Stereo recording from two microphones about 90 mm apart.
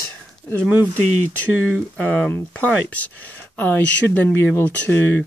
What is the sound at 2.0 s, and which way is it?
Speech, 15° left (ahead or behind).